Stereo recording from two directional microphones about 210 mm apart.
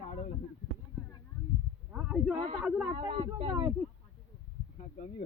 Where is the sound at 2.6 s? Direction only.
5° right (ahead or behind).